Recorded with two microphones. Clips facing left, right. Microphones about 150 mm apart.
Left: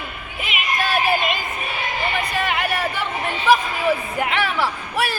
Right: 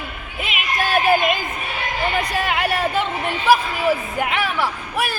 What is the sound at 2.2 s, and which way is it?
Speech, 30° right (ahead or behind).